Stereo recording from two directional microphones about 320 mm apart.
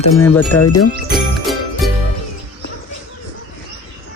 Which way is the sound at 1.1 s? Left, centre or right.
Centre.